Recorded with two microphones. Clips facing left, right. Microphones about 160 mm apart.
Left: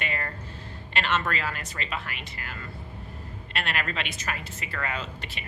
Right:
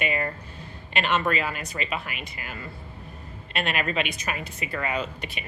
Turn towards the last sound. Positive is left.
turn(degrees=-15)  # may be behind; listen again after turning